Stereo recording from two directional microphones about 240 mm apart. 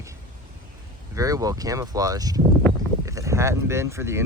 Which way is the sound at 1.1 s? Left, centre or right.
Centre.